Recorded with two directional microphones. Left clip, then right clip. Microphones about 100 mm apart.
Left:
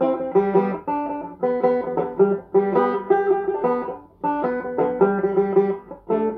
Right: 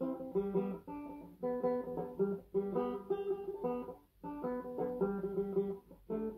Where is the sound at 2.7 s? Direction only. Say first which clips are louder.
Left 18 dB; 25° right (ahead or behind).